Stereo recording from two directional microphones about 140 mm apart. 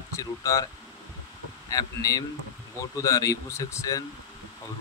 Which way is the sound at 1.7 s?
25° left (ahead or behind).